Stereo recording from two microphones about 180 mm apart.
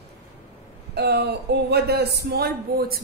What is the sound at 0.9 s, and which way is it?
Speech, 65° right (ahead or behind).